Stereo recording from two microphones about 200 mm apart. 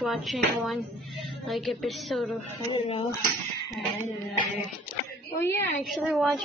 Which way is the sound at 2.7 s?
25° left (ahead or behind).